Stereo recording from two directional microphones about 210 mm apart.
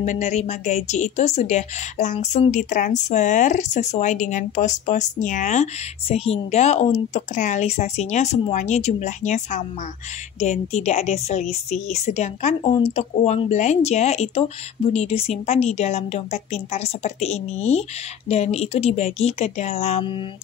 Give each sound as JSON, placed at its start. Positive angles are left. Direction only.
{"t": 0.0, "sound": "a woman's voice", "side_deg": 35}